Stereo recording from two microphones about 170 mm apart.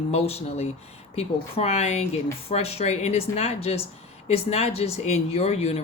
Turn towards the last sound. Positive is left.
turn(degrees=40)  # may be behind; listen again after turning